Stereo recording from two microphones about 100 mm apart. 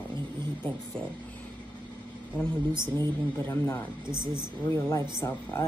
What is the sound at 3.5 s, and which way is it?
Speech, 30° left (ahead or behind).